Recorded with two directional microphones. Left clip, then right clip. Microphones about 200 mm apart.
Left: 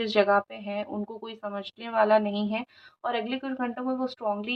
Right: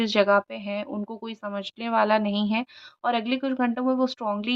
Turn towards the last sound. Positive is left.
turn(degrees=-45)  # may be behind; listen again after turning